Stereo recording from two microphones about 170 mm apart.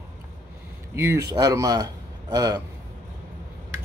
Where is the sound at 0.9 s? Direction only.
15° right (ahead or behind).